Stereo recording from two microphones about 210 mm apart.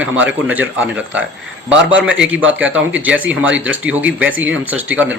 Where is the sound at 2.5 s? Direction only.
5° right (ahead or behind).